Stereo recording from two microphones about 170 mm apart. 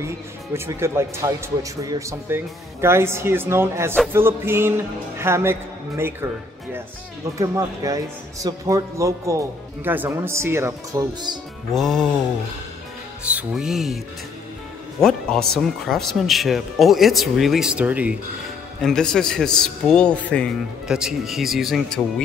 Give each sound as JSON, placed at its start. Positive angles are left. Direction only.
{"t": 0.0, "sound": "speech", "side_deg": -15}
{"t": 11.7, "sound": "speech", "side_deg": 0}
{"t": 13.2, "sound": "speech", "side_deg": -10}
{"t": 15.0, "sound": "speech", "side_deg": 5}
{"t": 18.8, "sound": "speech", "side_deg": 5}